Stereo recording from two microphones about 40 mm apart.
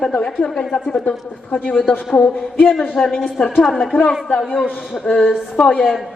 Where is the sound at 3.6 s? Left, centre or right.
Centre.